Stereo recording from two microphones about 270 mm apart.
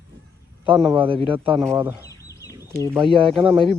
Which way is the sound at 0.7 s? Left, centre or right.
Centre.